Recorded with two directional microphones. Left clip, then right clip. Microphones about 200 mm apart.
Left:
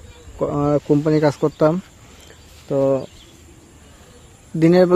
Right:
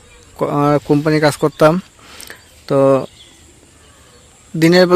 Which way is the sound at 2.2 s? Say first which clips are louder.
Right 6 dB; 30° right (ahead or behind).